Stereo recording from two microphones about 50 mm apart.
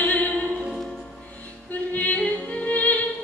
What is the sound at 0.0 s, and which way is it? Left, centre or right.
Music, left.